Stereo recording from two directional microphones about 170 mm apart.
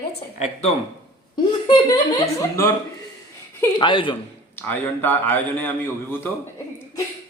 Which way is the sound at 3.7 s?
30° left (ahead or behind).